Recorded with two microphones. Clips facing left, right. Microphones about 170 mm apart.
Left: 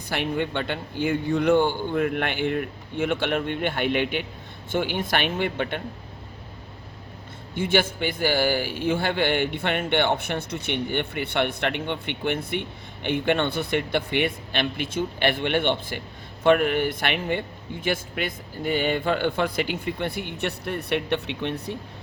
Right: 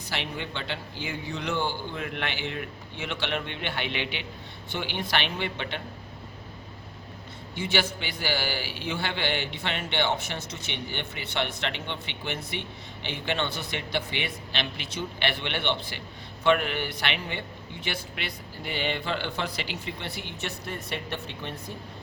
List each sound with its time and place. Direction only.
0.1 s a man's voice: 55° left (ahead or behind)
7.5 s a man's voice: 50° left (ahead or behind); by 21.6 s 65° left (ahead or behind)